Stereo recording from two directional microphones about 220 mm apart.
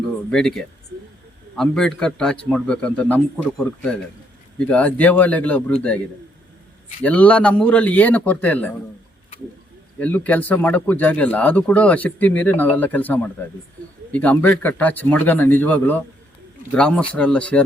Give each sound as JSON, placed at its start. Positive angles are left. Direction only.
{"t": 0.3, "sound": "a man's voice", "side_deg": 5}
{"t": 4.7, "sound": "speech", "side_deg": 5}
{"t": 7.0, "sound": "speech", "side_deg": 5}
{"t": 10.0, "sound": "a man's voice", "side_deg": 5}